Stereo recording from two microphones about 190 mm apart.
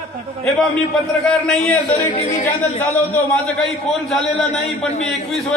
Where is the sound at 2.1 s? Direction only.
35° left (ahead or behind).